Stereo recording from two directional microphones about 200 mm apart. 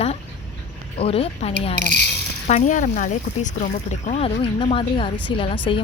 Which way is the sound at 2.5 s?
35° left (ahead or behind).